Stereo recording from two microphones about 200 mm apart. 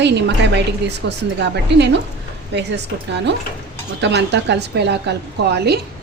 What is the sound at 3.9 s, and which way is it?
A woman's voice, 60° right (ahead or behind).